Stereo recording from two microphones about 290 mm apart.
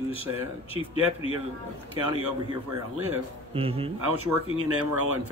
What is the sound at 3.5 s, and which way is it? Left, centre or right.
Speech, centre.